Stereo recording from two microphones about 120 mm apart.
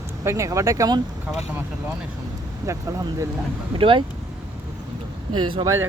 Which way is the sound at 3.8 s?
45° right (ahead or behind).